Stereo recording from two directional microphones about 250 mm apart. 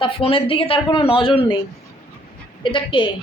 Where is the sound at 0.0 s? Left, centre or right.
Left.